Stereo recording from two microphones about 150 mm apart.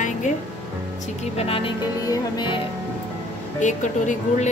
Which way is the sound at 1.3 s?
40° left (ahead or behind).